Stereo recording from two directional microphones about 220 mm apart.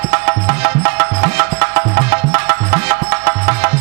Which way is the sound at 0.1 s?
15° right (ahead or behind).